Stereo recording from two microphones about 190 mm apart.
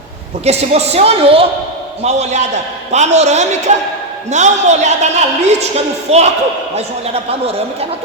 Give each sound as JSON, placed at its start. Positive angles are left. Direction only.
{"t": 0.4, "sound": "a man's voice", "side_deg": -35}